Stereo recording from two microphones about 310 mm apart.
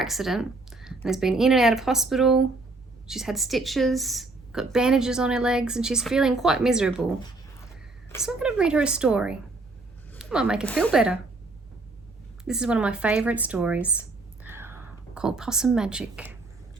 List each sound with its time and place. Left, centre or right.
0.0 s a woman's voice: centre
8.2 s a woman's voice: centre
12.5 s speech: centre